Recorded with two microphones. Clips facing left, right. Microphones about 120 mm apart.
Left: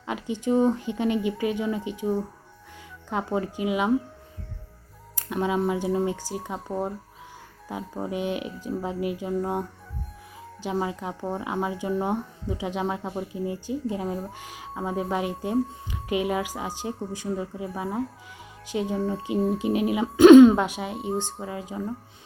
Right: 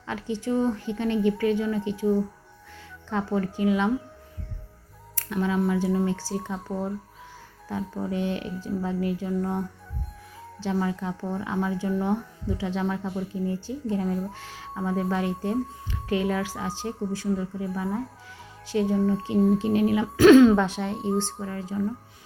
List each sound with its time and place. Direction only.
0.0 s speech: 15° left (ahead or behind)
3.3 s speech: 15° left (ahead or behind)
5.1 s speech: 20° left (ahead or behind)
8.1 s speech: 15° left (ahead or behind)
18.7 s speech: 15° left (ahead or behind)